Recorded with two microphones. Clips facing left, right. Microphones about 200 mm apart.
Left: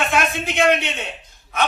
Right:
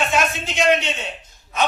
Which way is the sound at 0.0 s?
55° left (ahead or behind).